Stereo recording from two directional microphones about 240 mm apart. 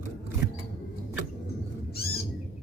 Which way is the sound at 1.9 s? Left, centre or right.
Left.